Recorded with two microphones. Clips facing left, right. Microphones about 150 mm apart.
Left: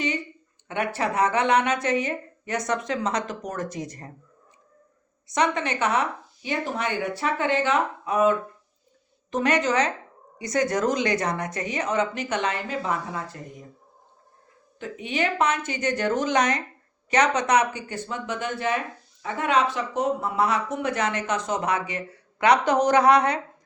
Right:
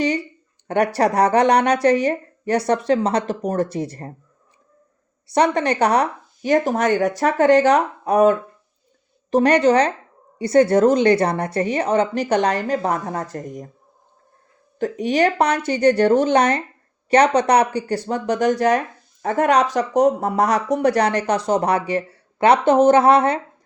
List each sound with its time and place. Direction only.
0.0 s speech: 35° right (ahead or behind)
5.3 s speech: 35° right (ahead or behind)
14.8 s speech: 40° right (ahead or behind)